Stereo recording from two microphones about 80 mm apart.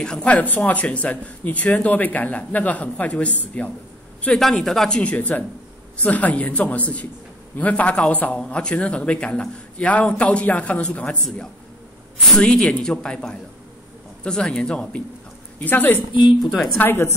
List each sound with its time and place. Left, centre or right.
0.0 s speech: centre
4.4 s a man's voice: centre
15.6 s speech: left